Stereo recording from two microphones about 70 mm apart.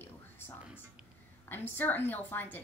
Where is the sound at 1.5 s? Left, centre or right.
Left.